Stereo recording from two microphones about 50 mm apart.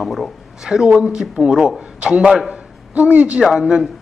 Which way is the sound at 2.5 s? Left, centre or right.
Right.